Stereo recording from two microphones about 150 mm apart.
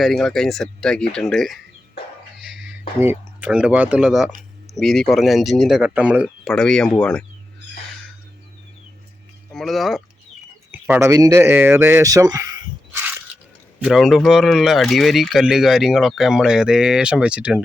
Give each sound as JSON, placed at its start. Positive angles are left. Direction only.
{"t": 0.0, "sound": "speech", "side_deg": 0}
{"t": 2.4, "sound": "a sound", "side_deg": -5}
{"t": 3.0, "sound": "speech", "side_deg": -15}
{"t": 6.4, "sound": "speech", "side_deg": 5}
{"t": 9.5, "sound": "speech", "side_deg": 0}
{"t": 10.7, "sound": "speech", "side_deg": -10}
{"t": 13.7, "sound": "speech", "side_deg": 0}